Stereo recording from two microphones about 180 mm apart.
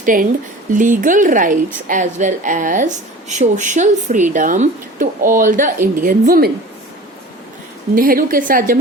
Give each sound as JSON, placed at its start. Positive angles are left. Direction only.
{"t": 0.0, "sound": "speech", "side_deg": -50}
{"t": 7.9, "sound": "speech", "side_deg": -50}